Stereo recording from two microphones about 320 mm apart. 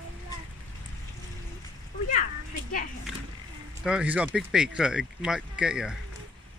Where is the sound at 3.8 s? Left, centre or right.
Centre.